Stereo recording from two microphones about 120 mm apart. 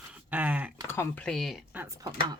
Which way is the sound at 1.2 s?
5° left (ahead or behind).